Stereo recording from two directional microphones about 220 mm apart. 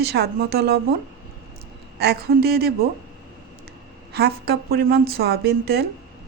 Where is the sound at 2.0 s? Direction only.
45° right (ahead or behind).